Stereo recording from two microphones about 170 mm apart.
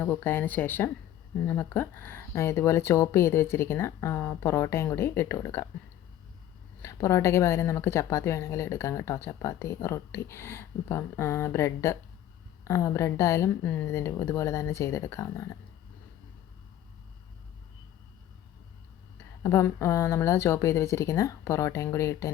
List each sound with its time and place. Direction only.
0.0 s speech: 10° left (ahead or behind)
6.8 s speech: 15° left (ahead or behind)
19.4 s speech: 15° left (ahead or behind)